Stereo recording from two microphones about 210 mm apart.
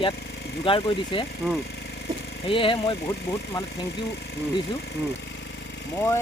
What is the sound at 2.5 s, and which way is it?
Speech, 25° left (ahead or behind).